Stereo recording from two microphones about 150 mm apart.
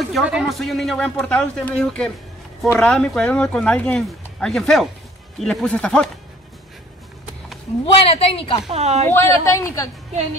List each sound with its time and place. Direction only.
0.1 s speech: 5° right (ahead or behind)
7.8 s a woman's voice: 40° left (ahead or behind)
8.6 s a woman's voice: 45° right (ahead or behind)
9.1 s speech: 20° left (ahead or behind)